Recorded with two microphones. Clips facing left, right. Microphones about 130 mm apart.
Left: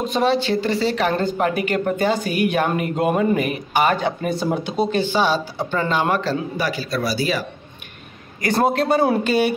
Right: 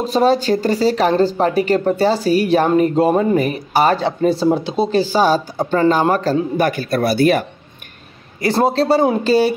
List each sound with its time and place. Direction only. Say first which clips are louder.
0.0 s speech: right 4 dB; 35° right (ahead or behind); by 7.4 s 55° right (ahead or behind)
8.4 s speech: right 3 dB; 25° right (ahead or behind)